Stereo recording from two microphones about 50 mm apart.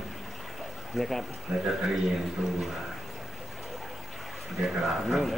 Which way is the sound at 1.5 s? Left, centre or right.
Centre.